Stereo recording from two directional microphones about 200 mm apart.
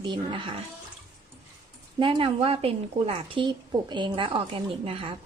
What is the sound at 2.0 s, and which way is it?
A woman's voice, 25° right (ahead or behind).